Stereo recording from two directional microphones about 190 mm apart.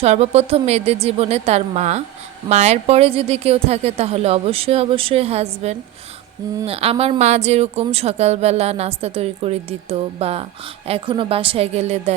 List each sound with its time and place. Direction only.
0.0 s speech: 35° right (ahead or behind)